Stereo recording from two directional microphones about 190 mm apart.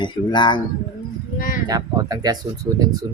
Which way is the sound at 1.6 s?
20° right (ahead or behind).